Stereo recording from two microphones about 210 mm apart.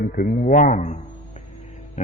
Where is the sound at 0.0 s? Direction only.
45° left (ahead or behind).